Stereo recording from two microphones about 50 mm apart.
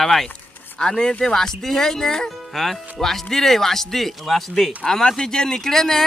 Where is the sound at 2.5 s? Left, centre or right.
Centre.